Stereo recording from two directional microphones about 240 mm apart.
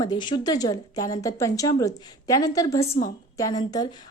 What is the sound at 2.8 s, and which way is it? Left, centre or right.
Speech, left.